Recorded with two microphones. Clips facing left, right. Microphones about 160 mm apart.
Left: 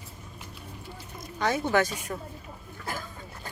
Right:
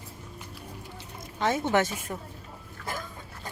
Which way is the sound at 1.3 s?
25° right (ahead or behind).